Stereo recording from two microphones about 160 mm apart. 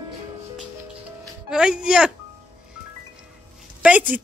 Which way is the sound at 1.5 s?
5° right (ahead or behind).